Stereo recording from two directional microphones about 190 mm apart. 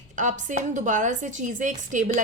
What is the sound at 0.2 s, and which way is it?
A woman's voice, 40° right (ahead or behind).